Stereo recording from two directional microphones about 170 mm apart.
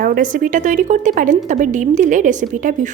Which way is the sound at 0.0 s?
55° right (ahead or behind).